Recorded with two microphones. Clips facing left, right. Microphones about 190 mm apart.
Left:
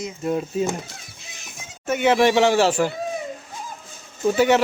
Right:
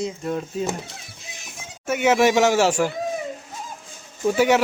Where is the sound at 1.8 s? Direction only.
10° right (ahead or behind).